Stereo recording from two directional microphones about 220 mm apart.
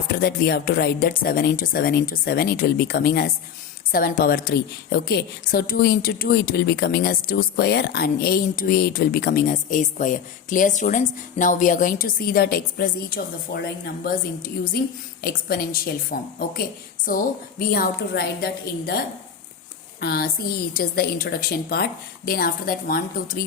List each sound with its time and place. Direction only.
0.1 s a woman's voice: 45° left (ahead or behind)